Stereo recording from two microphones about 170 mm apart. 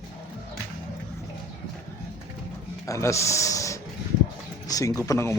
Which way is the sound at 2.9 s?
15° left (ahead or behind).